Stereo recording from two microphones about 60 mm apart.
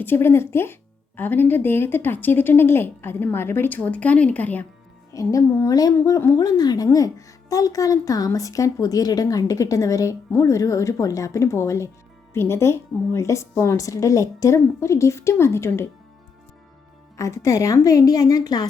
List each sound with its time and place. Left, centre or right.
0.0 s speech: left
3.8 s speech: left
5.1 s a child's voice: left
6.1 s a child's voice: left
10.3 s a woman's voice: left
14.8 s a woman's voice: left
17.2 s a child's voice: left